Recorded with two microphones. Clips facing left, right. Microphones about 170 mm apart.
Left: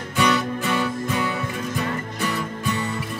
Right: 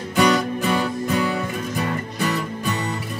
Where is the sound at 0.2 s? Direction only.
40° right (ahead or behind).